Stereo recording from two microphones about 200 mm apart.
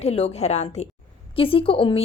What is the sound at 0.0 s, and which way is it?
A woman's voice, 30° left (ahead or behind).